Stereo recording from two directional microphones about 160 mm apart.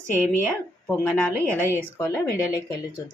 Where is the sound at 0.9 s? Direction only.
10° left (ahead or behind).